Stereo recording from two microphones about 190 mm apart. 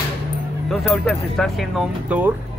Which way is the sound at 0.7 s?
Centre (ahead or behind).